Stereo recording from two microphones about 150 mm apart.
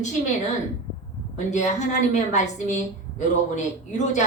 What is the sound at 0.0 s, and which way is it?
Speech, 50° left (ahead or behind).